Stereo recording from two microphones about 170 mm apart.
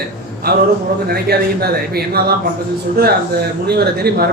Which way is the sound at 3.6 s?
70° right (ahead or behind).